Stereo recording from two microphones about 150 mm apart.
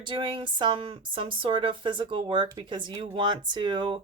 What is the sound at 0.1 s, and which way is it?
A woman's voice, 35° right (ahead or behind).